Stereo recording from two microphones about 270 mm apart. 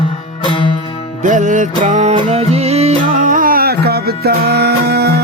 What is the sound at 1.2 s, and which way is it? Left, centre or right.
Music, right.